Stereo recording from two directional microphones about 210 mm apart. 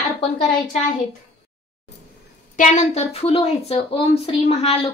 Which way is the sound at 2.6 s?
35° left (ahead or behind).